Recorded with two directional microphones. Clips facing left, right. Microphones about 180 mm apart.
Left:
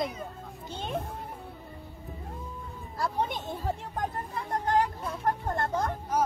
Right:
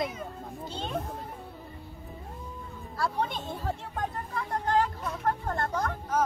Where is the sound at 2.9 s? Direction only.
15° left (ahead or behind).